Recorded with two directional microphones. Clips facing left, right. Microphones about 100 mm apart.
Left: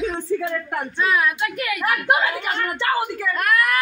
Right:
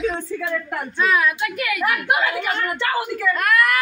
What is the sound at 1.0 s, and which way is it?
Speech, 25° left (ahead or behind).